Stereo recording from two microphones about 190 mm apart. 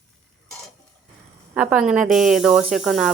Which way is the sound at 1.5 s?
5° right (ahead or behind).